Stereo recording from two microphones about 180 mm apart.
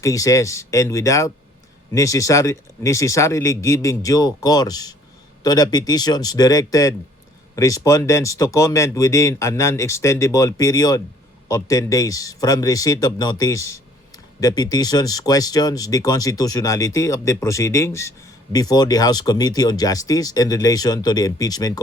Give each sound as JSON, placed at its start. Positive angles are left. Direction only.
{"t": 0.0, "sound": "speech", "side_deg": 20}